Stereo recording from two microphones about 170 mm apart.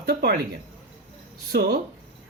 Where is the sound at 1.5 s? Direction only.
65° right (ahead or behind).